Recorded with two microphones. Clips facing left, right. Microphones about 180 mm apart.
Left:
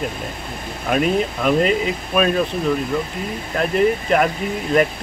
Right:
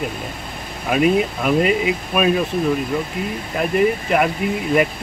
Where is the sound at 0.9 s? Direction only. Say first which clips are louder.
Right 2 dB; 5° right (ahead or behind).